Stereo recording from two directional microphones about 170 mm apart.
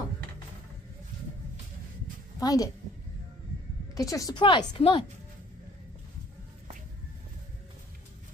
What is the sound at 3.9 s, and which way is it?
Speech, 20° left (ahead or behind).